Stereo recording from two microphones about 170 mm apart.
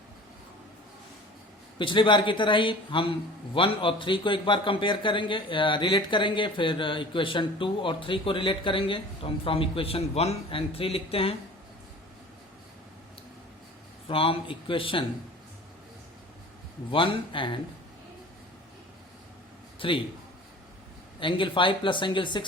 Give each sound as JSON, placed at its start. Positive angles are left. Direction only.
{"t": 1.8, "sound": "a man's voice", "side_deg": 30}
{"t": 14.1, "sound": "speech", "side_deg": 30}
{"t": 16.9, "sound": "a man's voice", "side_deg": 30}
{"t": 19.8, "sound": "speech", "side_deg": 30}
{"t": 21.2, "sound": "a man's voice", "side_deg": 30}